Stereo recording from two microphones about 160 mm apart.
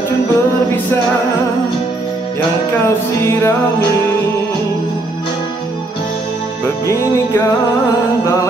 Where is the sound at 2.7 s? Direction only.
15° left (ahead or behind).